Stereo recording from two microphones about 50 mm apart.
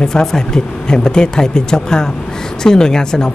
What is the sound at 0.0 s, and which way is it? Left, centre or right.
Speech, centre.